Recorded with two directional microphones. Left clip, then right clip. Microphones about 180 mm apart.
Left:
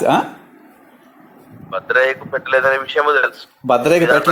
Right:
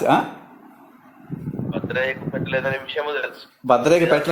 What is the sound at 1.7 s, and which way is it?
Speech, 40° left (ahead or behind).